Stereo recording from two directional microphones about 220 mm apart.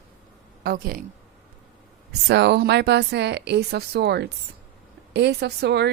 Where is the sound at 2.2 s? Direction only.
50° right (ahead or behind).